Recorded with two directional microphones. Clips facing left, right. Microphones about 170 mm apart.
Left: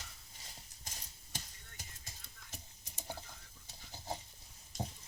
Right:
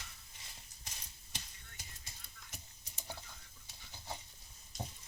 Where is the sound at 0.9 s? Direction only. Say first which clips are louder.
Left 1 dB; 45° left (ahead or behind).